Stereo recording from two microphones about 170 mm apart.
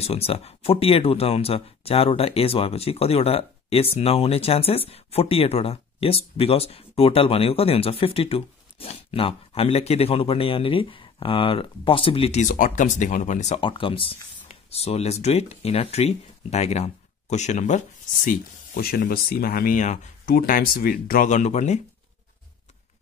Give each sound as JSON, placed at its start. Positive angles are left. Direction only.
{"t": 0.0, "sound": "speech", "side_deg": 35}
{"t": 13.6, "sound": "speech", "side_deg": 30}